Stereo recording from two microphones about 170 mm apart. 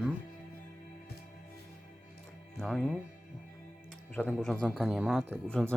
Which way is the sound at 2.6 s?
Centre (ahead or behind).